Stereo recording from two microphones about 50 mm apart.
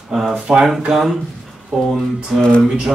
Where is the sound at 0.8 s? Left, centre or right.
Centre.